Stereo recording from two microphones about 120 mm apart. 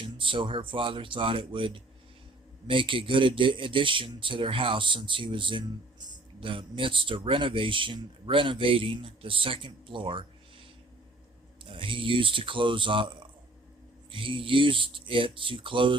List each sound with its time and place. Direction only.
0.0 s speech: 45° right (ahead or behind)
11.6 s speech: 45° right (ahead or behind)